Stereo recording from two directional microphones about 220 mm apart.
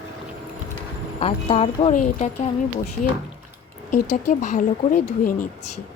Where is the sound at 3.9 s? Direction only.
90° left.